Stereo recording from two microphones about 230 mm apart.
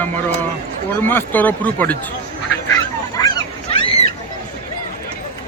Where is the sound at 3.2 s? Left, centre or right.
Left.